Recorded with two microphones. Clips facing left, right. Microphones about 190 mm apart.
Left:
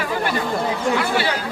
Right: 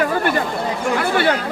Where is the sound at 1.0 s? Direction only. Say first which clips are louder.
Right 4 dB; 55° right (ahead or behind).